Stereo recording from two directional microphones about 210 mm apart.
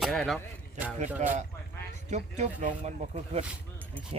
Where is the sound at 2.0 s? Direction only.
35° right (ahead or behind).